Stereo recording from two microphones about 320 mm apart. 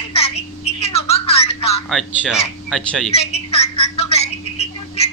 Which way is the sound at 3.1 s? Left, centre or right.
Centre.